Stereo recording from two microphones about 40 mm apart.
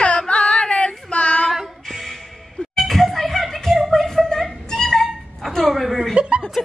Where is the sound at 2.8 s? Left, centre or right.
Centre.